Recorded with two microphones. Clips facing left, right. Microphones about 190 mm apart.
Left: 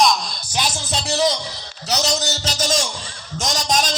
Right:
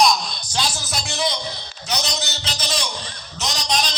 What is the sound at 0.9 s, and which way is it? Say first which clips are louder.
Music: left 7 dB; 35° left (ahead or behind).